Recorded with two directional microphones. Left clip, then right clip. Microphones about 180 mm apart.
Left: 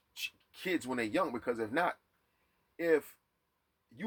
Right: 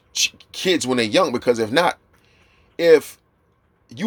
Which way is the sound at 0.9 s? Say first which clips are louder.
Right 15 dB; 55° right (ahead or behind).